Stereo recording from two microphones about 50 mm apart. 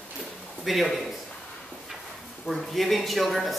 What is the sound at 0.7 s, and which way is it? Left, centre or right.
Speech, centre.